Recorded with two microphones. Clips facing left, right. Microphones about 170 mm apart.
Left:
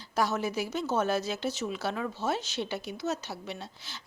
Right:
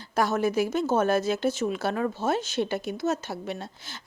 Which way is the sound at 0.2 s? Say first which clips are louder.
Right 5 dB; 50° right (ahead or behind).